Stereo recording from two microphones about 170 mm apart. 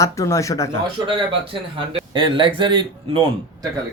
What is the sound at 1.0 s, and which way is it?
A man's voice, 30° right (ahead or behind).